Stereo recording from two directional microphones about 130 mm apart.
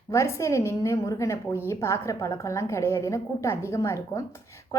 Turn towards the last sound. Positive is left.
turn(degrees=20)  # may be behind; listen again after turning